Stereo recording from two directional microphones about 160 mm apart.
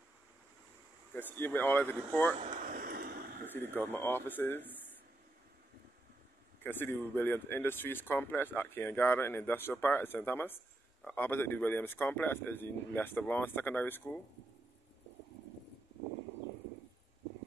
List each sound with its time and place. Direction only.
1.1 s speech: 10° left (ahead or behind)
2.6 s a sound: 70° right (ahead or behind)
3.5 s speech: 15° left (ahead or behind)
6.6 s speech: 15° left (ahead or behind)